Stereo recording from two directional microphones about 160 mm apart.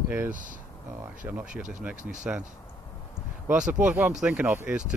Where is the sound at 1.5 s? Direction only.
50° right (ahead or behind).